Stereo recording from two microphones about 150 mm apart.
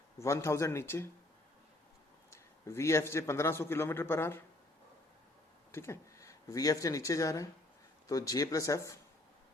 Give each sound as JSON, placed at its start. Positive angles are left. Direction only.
{"t": 0.2, "sound": "a man's voice", "side_deg": 20}
{"t": 2.3, "sound": "a man's voice", "side_deg": 20}
{"t": 5.7, "sound": "a man's voice", "side_deg": 15}